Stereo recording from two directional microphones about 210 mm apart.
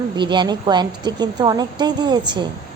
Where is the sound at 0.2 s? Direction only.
20° right (ahead or behind).